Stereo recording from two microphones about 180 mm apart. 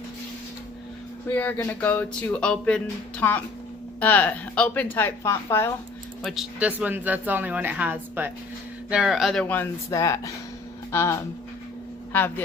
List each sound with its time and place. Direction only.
1.3 s speech: 10° left (ahead or behind)
6.2 s speech: centre (ahead or behind)